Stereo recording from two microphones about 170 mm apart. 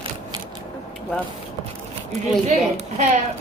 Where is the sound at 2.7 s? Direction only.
45° right (ahead or behind).